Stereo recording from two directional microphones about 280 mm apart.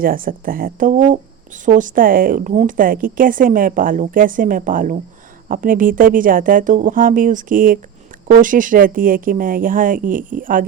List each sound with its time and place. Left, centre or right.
0.0 s a woman's voice: right